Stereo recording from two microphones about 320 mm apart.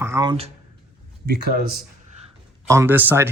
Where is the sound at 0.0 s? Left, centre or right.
Centre.